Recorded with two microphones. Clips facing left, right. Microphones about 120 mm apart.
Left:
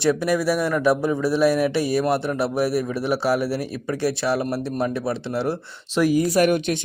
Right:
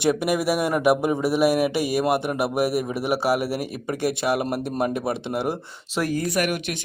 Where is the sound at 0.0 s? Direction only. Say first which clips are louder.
Left 1 dB; 15° right (ahead or behind).